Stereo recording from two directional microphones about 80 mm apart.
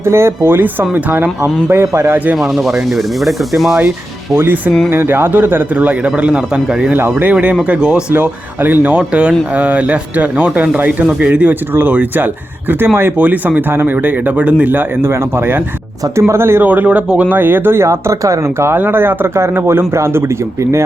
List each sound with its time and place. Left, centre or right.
0.0 s speech: right
2.1 s speech: centre
2.4 s speech: centre
4.4 s speech: right; by 6.9 s centre
6.9 s speech: right
8.1 s speech: right
13.1 s speech: centre
16.6 s speech: centre
17.8 s speech: right